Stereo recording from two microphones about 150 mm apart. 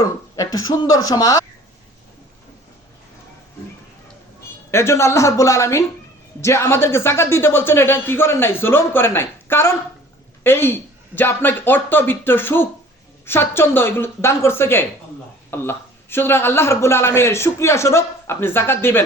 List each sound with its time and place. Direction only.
0.0 s speech: 25° left (ahead or behind)
4.7 s a man's voice: 20° left (ahead or behind)